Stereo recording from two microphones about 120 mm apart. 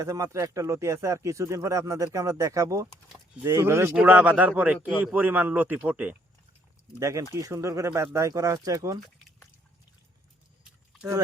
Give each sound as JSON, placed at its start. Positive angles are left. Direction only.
{"t": 0.0, "sound": "a man's voice", "side_deg": -25}
{"t": 7.0, "sound": "speech", "side_deg": -25}